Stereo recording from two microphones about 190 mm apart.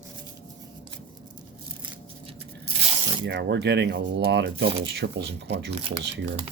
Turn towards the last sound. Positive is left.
turn(degrees=-65)  # may be behind; listen again after turning